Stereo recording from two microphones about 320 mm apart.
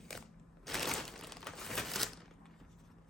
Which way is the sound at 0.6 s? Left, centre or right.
Centre.